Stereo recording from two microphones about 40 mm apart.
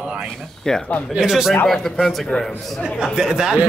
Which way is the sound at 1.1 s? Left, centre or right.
Centre.